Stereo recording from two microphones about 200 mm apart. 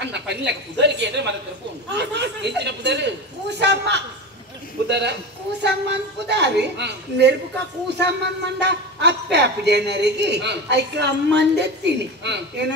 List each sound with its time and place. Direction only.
0.0 s a woman's voice: 60° right (ahead or behind)
2.0 s a sound: 60° right (ahead or behind)
4.8 s a man's voice: 60° right (ahead or behind)